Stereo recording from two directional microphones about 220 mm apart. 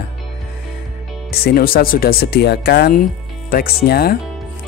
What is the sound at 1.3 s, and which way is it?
Speech, 45° left (ahead or behind).